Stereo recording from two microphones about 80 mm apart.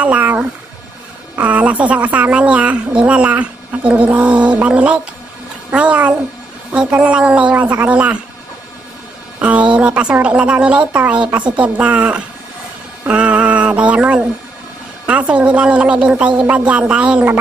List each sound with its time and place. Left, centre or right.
0.0 s music: centre
1.3 s a woman's voice: centre
9.4 s a woman's voice: centre
13.0 s mantra: centre
15.0 s a woman's voice: centre